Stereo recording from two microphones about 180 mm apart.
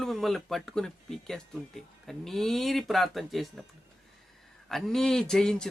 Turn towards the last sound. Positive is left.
turn(degrees=5)  # may be behind; listen again after turning